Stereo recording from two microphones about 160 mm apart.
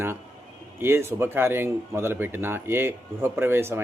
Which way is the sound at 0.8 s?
15° right (ahead or behind).